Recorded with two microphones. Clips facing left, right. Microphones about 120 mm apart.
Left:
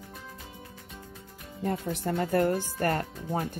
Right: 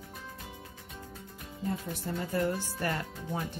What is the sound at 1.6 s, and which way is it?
Speech, 60° left (ahead or behind).